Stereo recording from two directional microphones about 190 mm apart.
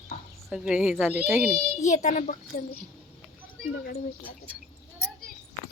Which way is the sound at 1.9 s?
40° left (ahead or behind).